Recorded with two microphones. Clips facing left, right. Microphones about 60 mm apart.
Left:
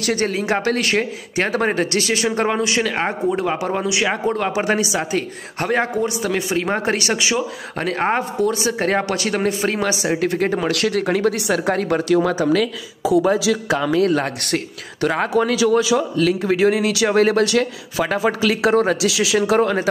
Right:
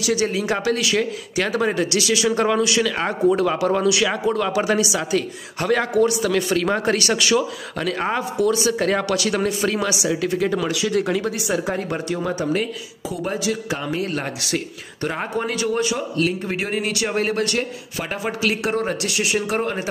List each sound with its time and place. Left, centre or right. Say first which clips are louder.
0.0 s a man's voice: left 1 dB; left
7.7 s speech: left 3 dB; left
13.2 s a man's voice: left 6 dB; left